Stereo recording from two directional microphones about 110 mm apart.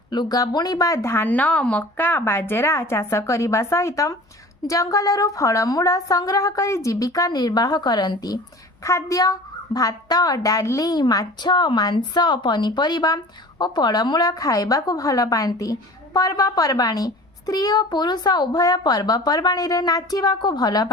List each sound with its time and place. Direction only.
0.1 s a woman's voice: 40° left (ahead or behind)